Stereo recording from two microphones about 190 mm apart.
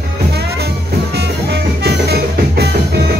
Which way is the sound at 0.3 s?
60° right (ahead or behind).